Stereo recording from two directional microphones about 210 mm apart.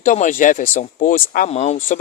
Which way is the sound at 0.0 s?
35° left (ahead or behind).